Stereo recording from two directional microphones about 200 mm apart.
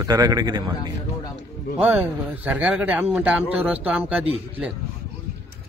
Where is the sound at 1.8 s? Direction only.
10° right (ahead or behind).